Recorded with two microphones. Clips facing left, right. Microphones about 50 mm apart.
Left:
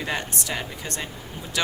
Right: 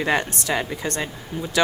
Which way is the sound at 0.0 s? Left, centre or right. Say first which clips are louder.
Right 7 dB; right.